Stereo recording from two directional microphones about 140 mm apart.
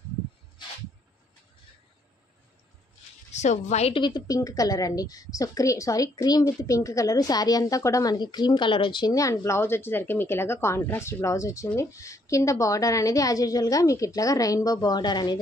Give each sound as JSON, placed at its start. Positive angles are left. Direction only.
{"t": 3.3, "sound": "a woman's voice", "side_deg": 55}
{"t": 3.9, "sound": "a woman's voice", "side_deg": 30}